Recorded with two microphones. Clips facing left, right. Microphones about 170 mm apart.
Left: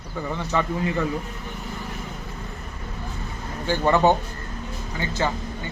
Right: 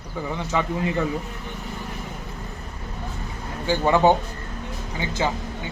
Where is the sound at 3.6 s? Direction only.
10° right (ahead or behind).